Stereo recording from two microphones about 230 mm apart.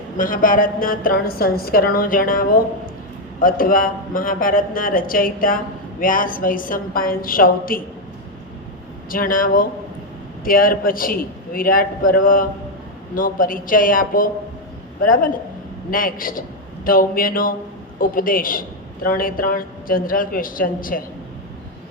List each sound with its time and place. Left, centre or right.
0.2 s a woman's voice: left
9.0 s a woman's voice: left